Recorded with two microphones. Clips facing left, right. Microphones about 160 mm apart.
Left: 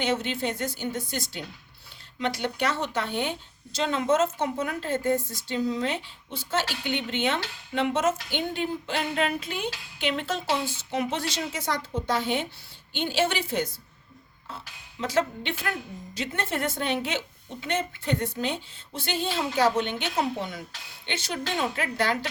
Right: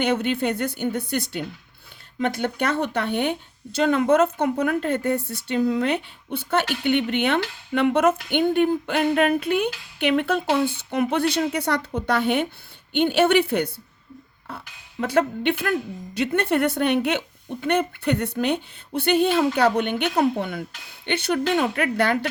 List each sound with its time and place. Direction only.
0.0 s a woman's voice: 60° right (ahead or behind)
15.0 s a woman's voice: 60° right (ahead or behind)